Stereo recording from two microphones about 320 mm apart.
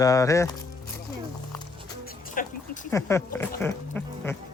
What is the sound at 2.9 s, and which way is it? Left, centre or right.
Speech, centre.